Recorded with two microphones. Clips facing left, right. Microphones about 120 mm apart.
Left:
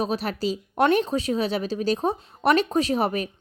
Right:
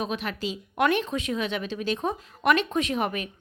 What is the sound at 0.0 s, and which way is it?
Speech, 35° left (ahead or behind).